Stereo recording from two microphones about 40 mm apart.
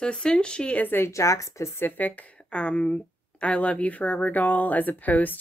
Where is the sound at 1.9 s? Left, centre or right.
Left.